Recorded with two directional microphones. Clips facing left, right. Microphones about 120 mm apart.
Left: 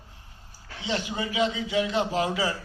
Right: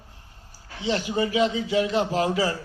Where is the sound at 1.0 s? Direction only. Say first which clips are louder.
Right 5 dB; 35° right (ahead or behind).